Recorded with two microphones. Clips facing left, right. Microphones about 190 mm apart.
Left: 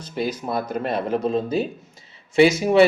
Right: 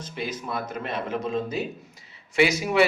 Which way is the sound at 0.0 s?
35° left (ahead or behind).